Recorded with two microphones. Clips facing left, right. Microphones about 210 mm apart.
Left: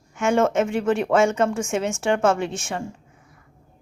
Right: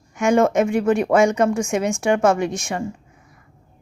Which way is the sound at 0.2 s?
15° right (ahead or behind).